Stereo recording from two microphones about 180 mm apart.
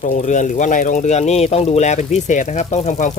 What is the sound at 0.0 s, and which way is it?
Speech, 45° left (ahead or behind).